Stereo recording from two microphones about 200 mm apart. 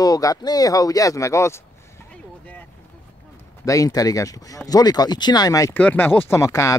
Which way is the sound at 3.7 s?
15° left (ahead or behind).